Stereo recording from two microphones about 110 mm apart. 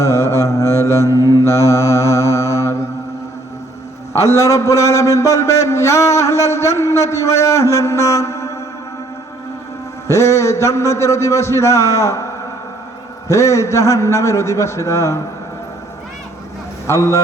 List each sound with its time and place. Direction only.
0.0 s mantra: 25° left (ahead or behind)
4.4 s a man's voice: 30° left (ahead or behind)
10.1 s a man's voice: 25° left (ahead or behind)
16.8 s a man's voice: 30° left (ahead or behind)